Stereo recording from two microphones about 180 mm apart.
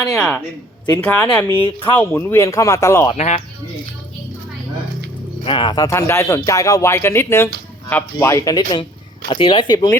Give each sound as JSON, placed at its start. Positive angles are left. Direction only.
{"t": 0.9, "sound": "speech", "side_deg": 10}
{"t": 3.1, "sound": "speech", "side_deg": 35}
{"t": 5.5, "sound": "speech", "side_deg": 25}